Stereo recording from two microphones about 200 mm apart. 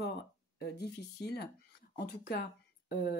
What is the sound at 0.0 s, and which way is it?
Speech, 55° left (ahead or behind).